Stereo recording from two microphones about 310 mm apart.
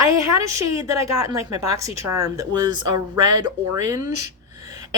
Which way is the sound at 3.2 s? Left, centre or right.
Right.